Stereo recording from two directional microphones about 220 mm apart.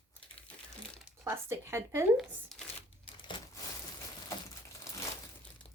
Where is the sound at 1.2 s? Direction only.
10° right (ahead or behind).